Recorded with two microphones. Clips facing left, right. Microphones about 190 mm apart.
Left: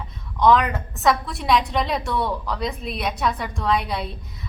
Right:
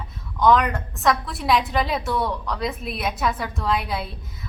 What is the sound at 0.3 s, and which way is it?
A woman's voice, centre (ahead or behind).